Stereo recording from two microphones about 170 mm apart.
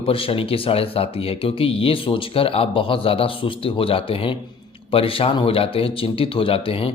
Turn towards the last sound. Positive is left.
turn(degrees=35)  # may be behind; listen again after turning